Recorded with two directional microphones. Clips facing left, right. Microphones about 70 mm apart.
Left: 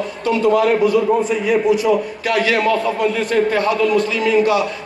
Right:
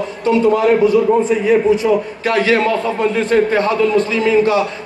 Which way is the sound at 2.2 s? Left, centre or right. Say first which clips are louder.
Right 2 dB; right.